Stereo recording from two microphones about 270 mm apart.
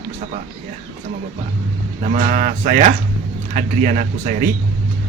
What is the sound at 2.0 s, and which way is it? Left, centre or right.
Speech, right.